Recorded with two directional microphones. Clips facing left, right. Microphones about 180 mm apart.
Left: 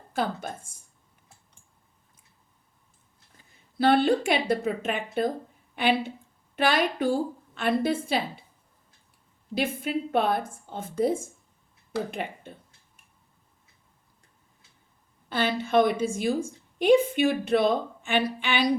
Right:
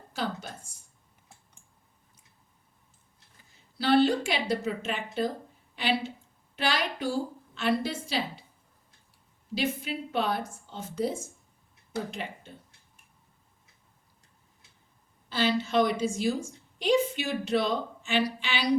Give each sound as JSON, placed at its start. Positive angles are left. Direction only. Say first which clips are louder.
{"t": 0.1, "sound": "a woman's voice", "louder": "left 5 dB", "side_deg": 55}
{"t": 3.8, "sound": "a woman's voice", "louder": "left 2 dB", "side_deg": 55}
{"t": 9.6, "sound": "a woman's voice", "louder": "left 3 dB", "side_deg": 55}
{"t": 15.3, "sound": "a woman's voice", "louder": "left 2 dB", "side_deg": 55}